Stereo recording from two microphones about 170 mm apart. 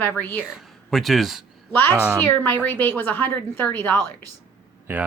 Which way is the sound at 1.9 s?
10° right (ahead or behind).